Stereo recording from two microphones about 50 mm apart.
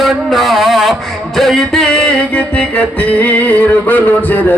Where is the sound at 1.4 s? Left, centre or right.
Centre.